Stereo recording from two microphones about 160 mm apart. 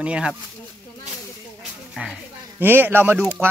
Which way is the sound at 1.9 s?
5° right (ahead or behind).